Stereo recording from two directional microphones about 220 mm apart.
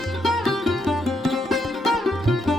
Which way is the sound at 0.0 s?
Centre (ahead or behind).